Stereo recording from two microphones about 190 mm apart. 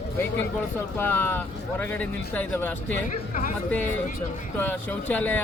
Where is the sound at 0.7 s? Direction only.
10° left (ahead or behind).